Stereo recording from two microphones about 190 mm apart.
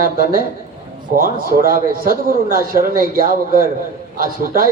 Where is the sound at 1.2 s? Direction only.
55° left (ahead or behind).